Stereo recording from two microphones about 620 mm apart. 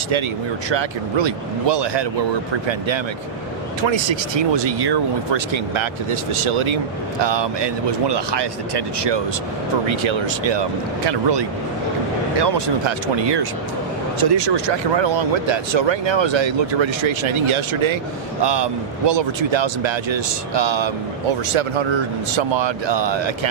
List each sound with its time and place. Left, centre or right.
0.7 s speech: right